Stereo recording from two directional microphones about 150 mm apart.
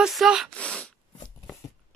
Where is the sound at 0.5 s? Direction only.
5° left (ahead or behind).